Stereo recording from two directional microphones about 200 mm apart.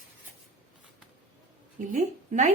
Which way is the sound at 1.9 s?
40° right (ahead or behind).